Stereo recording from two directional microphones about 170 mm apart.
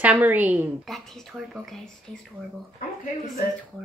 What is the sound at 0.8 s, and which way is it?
Speech, centre (ahead or behind).